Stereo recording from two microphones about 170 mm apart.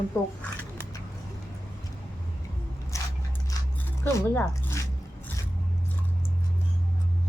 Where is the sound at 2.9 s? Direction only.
20° left (ahead or behind).